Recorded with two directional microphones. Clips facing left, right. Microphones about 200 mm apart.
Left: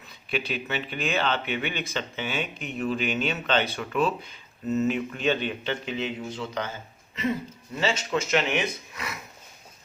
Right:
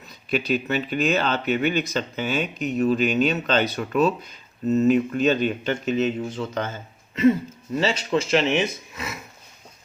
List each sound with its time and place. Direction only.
0.3 s speech: 40° right (ahead or behind)
7.8 s speech: 35° right (ahead or behind)